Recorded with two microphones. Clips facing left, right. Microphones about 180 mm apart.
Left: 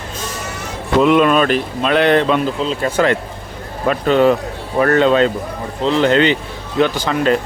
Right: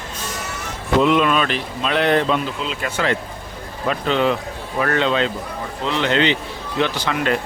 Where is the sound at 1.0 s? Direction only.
50° left (ahead or behind); by 2.4 s 65° left (ahead or behind).